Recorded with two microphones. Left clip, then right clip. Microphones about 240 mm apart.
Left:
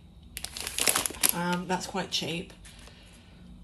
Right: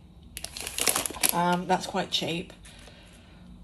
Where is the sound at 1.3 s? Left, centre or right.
Centre.